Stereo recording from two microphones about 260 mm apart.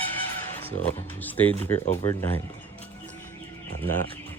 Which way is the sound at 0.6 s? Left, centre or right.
Centre.